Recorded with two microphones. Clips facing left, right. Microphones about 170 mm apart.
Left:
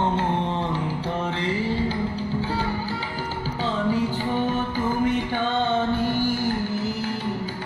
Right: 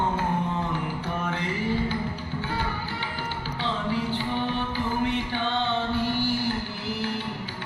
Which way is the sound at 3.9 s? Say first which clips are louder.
Left 4 dB; 45° left (ahead or behind).